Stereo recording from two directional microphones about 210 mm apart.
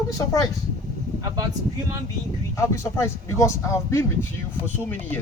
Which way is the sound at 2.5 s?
15° left (ahead or behind).